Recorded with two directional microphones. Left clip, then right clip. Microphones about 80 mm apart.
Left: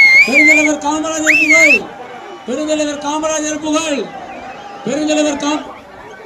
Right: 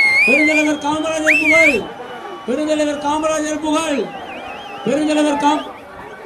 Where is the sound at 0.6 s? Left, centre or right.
Right.